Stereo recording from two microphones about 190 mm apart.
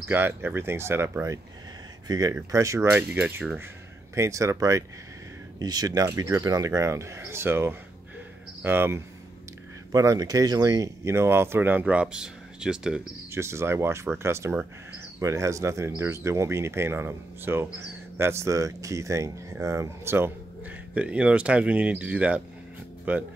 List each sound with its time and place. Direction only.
0.1 s speech: 10° right (ahead or behind)